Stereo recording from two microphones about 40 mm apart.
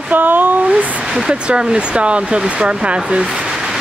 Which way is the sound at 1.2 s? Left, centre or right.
Right.